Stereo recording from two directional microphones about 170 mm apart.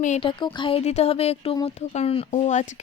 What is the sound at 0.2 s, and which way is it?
Speech, 30° left (ahead or behind).